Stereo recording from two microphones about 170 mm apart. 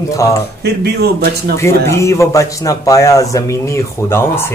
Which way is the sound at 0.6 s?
70° right (ahead or behind).